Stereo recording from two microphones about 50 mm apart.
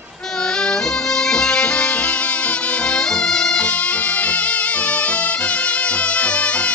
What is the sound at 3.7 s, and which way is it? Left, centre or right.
Music, left.